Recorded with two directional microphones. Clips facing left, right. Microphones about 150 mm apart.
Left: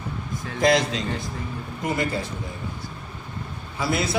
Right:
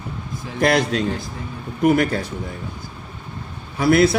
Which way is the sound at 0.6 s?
60° right (ahead or behind).